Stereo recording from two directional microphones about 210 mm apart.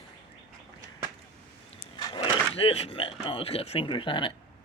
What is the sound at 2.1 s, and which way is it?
Speech, 25° left (ahead or behind).